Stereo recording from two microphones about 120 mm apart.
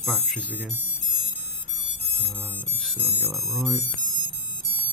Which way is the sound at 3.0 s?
15° right (ahead or behind).